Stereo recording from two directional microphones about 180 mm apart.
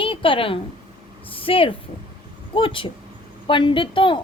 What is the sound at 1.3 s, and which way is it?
A woman's voice, 30° left (ahead or behind).